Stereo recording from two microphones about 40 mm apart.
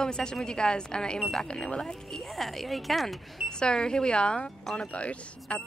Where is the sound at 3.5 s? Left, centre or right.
Left.